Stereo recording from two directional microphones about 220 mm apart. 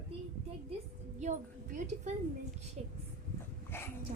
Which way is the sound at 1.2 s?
35° right (ahead or behind).